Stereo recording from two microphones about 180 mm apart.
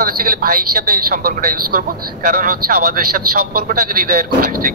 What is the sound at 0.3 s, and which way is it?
Speech, 55° right (ahead or behind).